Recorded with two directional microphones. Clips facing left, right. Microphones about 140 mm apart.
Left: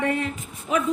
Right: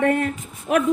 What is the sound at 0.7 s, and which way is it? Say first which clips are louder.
Speech: right 4 dB; 60° right (ahead or behind).